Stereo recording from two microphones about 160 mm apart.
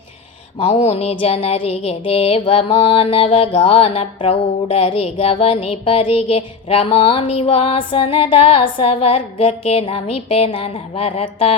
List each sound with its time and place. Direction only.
0.6 s music: 40° left (ahead or behind)